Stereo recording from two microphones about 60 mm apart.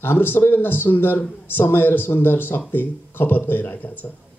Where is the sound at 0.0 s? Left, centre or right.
Left.